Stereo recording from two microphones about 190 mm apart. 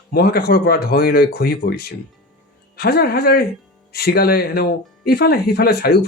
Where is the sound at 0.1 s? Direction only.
55° left (ahead or behind).